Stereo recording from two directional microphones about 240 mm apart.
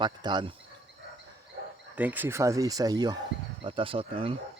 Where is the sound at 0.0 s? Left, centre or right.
Centre.